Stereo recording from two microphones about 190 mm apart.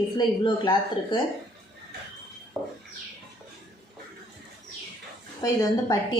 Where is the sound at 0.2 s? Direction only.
25° left (ahead or behind).